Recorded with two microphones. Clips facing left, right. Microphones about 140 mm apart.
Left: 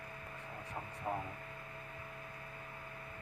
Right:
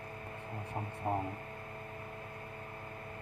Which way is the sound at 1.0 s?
25° right (ahead or behind).